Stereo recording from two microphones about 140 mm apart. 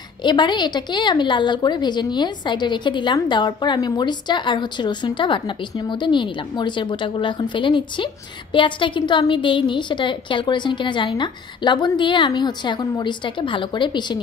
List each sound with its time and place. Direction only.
0.2 s a woman's voice: 35° left (ahead or behind)